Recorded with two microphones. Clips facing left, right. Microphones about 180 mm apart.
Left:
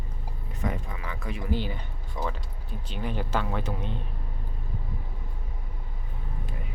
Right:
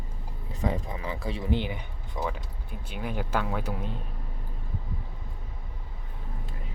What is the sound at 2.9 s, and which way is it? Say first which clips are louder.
Speech: even; 10° right (ahead or behind).